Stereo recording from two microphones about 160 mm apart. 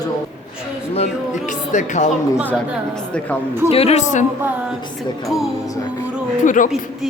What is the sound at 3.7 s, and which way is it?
Speech, 40° left (ahead or behind).